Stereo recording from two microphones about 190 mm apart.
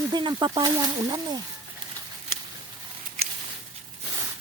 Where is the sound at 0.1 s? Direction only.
25° right (ahead or behind).